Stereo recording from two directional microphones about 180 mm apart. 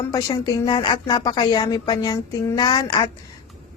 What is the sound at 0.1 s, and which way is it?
A woman's voice, 20° left (ahead or behind).